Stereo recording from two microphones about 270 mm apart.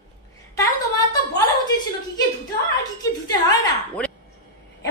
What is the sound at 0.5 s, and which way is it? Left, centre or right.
Speech, centre.